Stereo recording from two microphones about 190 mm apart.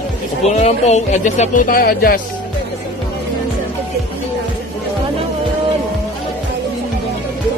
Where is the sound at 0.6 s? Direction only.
35° left (ahead or behind); by 2.2 s 50° left (ahead or behind).